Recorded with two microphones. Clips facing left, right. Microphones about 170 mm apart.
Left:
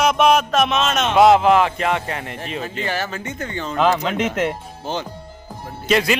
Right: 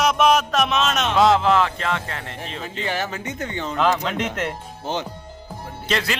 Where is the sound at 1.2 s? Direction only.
15° left (ahead or behind).